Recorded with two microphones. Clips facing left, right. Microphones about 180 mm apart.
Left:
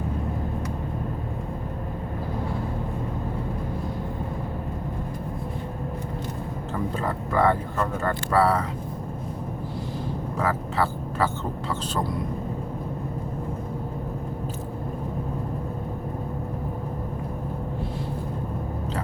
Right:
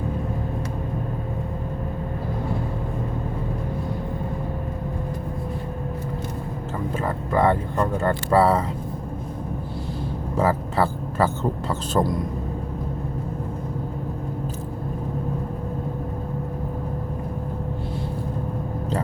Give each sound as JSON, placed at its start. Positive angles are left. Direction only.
{"t": 6.9, "sound": "speech", "side_deg": -20}
{"t": 10.3, "sound": "speech", "side_deg": -30}